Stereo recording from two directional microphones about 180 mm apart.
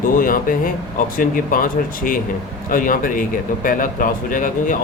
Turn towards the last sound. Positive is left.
turn(degrees=45)  # may be behind; listen again after turning